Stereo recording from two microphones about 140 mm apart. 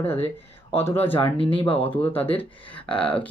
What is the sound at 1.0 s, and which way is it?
Speech, 15° left (ahead or behind).